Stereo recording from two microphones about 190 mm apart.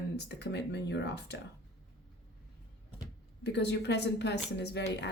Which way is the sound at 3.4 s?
65° left (ahead or behind).